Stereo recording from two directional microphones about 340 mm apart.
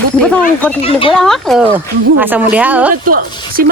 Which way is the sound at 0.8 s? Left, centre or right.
Centre.